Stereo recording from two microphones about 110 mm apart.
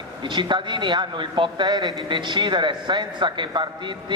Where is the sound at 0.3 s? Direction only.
45° right (ahead or behind).